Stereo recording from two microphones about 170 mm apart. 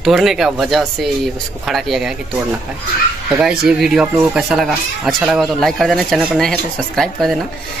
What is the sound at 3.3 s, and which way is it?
Speech, 5° right (ahead or behind).